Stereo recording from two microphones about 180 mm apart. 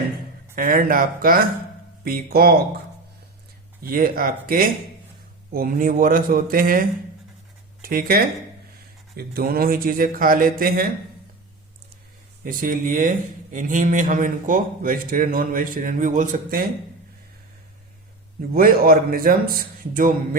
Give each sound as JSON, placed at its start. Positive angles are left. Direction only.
{"t": 0.5, "sound": "a man's voice", "side_deg": -50}
{"t": 3.8, "sound": "a man's voice", "side_deg": -55}
{"t": 12.5, "sound": "a man's voice", "side_deg": -50}
{"t": 18.5, "sound": "a man's voice", "side_deg": -55}